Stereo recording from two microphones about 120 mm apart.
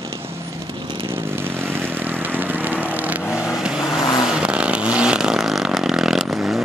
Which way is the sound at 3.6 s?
5° right (ahead or behind).